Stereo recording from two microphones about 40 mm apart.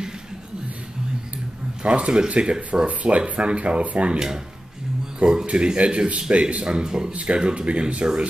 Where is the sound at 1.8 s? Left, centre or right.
Right.